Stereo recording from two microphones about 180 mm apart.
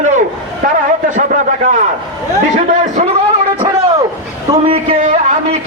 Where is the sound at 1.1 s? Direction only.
45° right (ahead or behind).